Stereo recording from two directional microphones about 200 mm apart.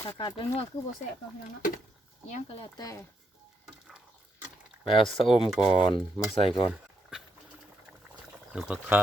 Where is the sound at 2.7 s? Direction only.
20° left (ahead or behind).